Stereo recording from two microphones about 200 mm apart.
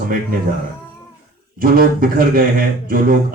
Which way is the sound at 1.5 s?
45° right (ahead or behind).